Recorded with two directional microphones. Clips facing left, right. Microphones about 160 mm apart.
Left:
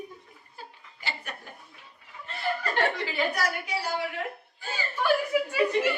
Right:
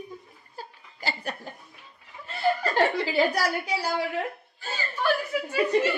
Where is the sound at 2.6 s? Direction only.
35° right (ahead or behind).